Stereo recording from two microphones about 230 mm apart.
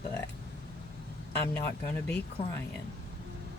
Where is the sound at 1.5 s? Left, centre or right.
Centre.